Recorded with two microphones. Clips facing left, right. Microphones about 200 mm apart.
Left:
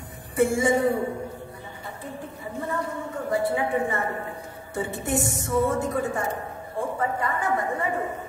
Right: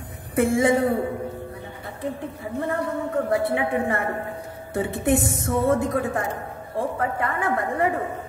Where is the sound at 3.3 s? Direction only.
65° right (ahead or behind).